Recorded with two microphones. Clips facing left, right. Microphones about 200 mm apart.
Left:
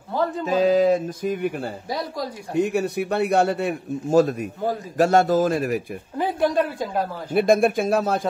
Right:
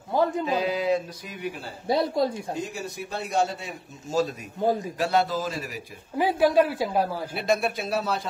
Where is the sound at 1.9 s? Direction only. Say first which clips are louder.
Right 8 dB; 25° right (ahead or behind).